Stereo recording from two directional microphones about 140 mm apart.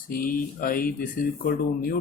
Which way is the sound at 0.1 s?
90° left.